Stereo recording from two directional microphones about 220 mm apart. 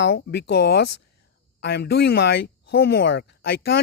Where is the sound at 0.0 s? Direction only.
50° left (ahead or behind).